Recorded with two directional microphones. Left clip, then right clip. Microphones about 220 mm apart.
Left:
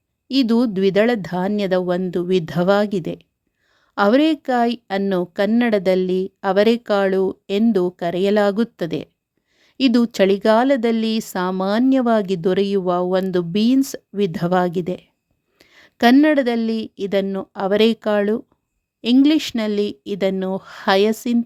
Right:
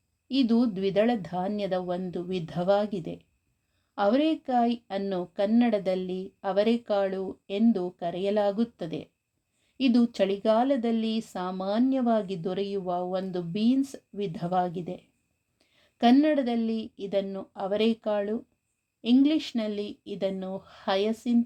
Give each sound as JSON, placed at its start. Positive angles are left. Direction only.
{"t": 0.3, "sound": "speech", "side_deg": 35}